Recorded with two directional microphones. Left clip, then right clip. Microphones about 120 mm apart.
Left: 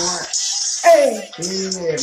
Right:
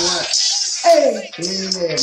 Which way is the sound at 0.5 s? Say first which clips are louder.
Left 2 dB; 20° right (ahead or behind).